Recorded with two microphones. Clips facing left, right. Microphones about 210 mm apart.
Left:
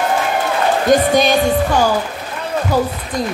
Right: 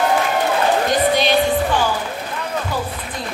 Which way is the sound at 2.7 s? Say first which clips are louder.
Left 11 dB; 40° left (ahead or behind).